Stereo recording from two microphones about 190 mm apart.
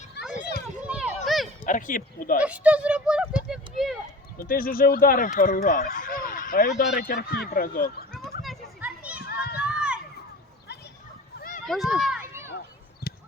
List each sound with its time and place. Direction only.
0.9 s run: 5° right (ahead or behind)
1.6 s speech: 45° left (ahead or behind)
2.4 s a child's voice: 5° right (ahead or behind)
3.5 s a sound: centre (ahead or behind)
4.4 s fowl: 50° left (ahead or behind)
6.9 s speech: 50° left (ahead or behind)
8.8 s children playing: 5° right (ahead or behind)
9.3 s run: 55° left (ahead or behind)
9.6 s run: 5° right (ahead or behind)
11.3 s a sound: 45° left (ahead or behind)
11.6 s speech: centre (ahead or behind)